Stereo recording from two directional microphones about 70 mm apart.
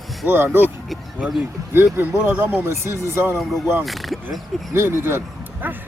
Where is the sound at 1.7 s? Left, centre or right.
Right.